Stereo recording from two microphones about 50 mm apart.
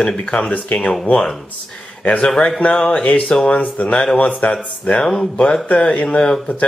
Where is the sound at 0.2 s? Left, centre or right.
Left.